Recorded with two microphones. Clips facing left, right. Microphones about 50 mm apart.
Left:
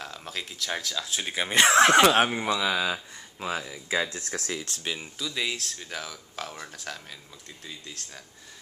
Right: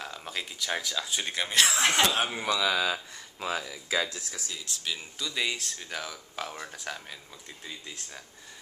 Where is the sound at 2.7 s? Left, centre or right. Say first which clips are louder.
Left 1 dB; centre.